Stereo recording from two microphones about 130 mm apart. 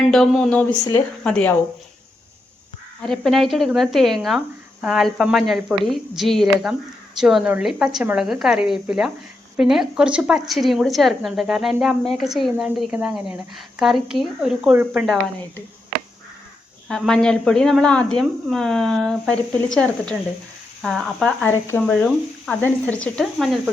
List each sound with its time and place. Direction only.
0.1 s a woman's voice: 5° left (ahead or behind)
3.0 s a woman's voice: centre (ahead or behind)
16.9 s a woman's voice: 5° left (ahead or behind)
21.5 s speech: 20° left (ahead or behind)
21.8 s speech: 10° left (ahead or behind)